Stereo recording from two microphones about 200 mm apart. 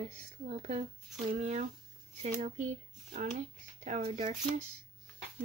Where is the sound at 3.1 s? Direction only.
35° right (ahead or behind).